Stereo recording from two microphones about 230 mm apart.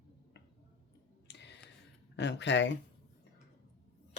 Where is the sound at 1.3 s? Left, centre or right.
Left.